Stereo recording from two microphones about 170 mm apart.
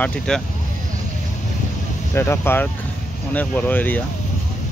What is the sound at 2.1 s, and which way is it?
Speech, 15° left (ahead or behind).